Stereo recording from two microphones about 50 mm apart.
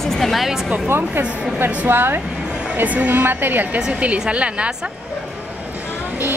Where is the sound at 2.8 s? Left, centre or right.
Right.